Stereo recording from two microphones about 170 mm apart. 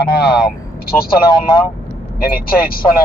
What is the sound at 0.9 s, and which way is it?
Speech, 5° left (ahead or behind).